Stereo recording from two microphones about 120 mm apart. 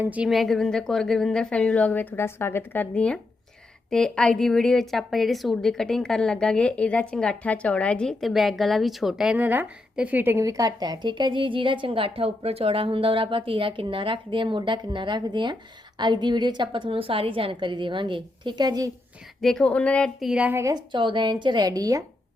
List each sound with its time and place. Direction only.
0.0 s a woman's voice: 15° right (ahead or behind)
0.3 s a woman's voice: centre (ahead or behind); by 10.4 s 15° right (ahead or behind)
10.4 s a woman's voice: 30° right (ahead or behind)
19.4 s a woman's voice: 5° left (ahead or behind)
20.1 s a woman's voice: 5° right (ahead or behind)
20.6 s a woman's voice: 25° right (ahead or behind)
20.9 s a woman's voice: 40° right (ahead or behind)